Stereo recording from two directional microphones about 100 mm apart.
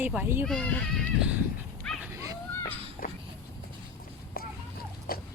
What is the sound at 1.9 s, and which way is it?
Dog, 5° left (ahead or behind).